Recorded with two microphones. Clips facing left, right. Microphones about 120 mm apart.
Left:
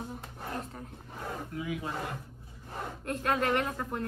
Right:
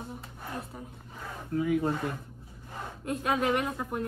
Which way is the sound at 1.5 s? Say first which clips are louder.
Right 13 dB; 45° right (ahead or behind).